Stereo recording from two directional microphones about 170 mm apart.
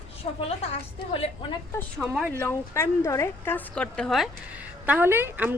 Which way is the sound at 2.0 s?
Centre (ahead or behind).